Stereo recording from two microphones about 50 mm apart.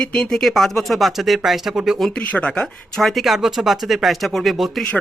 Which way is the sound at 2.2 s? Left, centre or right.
Left.